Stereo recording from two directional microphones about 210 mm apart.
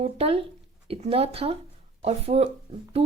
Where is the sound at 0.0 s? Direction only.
25° right (ahead or behind).